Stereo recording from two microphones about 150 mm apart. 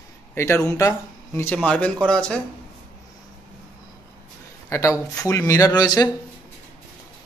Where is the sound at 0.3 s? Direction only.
15° left (ahead or behind).